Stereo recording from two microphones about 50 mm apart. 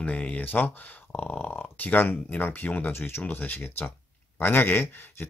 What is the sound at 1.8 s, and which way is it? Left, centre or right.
Speech, left.